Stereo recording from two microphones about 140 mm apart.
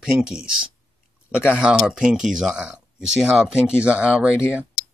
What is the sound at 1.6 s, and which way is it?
Speech, 5° right (ahead or behind).